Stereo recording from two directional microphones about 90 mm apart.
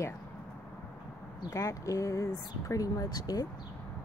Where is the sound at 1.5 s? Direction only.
35° left (ahead or behind).